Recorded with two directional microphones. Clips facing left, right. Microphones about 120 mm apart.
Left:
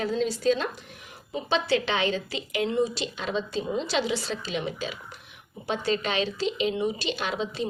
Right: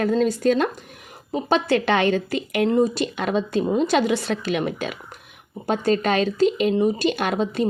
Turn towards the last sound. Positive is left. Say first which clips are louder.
# right 7 dB
turn(degrees=-50)  # may be behind; listen again after turning